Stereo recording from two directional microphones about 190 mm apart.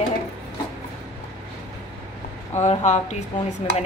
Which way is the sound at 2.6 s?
40° left (ahead or behind).